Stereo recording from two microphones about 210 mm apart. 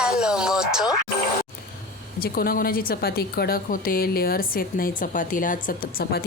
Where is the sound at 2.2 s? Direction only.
45° left (ahead or behind).